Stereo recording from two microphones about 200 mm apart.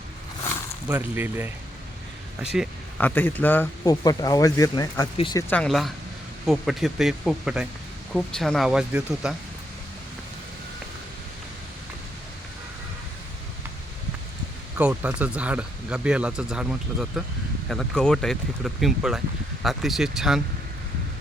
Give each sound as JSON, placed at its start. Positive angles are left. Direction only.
{"t": 0.9, "sound": "speech", "side_deg": -10}
{"t": 3.0, "sound": "speech", "side_deg": 10}
{"t": 5.5, "sound": "speech", "side_deg": 5}
{"t": 14.8, "sound": "speech", "side_deg": -5}